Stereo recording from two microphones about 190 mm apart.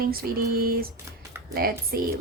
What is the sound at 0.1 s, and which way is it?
A woman's voice, 50° right (ahead or behind).